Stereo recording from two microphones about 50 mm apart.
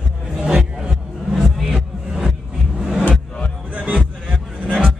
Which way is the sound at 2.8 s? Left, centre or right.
Centre.